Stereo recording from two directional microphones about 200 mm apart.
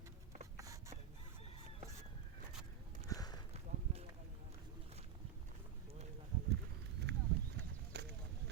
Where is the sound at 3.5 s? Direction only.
30° right (ahead or behind).